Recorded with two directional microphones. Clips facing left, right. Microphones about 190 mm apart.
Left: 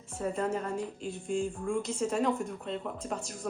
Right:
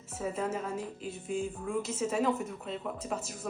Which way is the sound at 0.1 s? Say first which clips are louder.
Left 2 dB; 5° right (ahead or behind).